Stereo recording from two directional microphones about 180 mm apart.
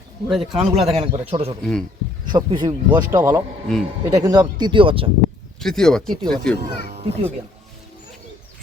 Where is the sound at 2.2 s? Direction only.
25° right (ahead or behind).